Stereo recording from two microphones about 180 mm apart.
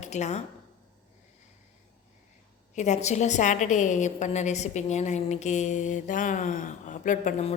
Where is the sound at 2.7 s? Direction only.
40° left (ahead or behind).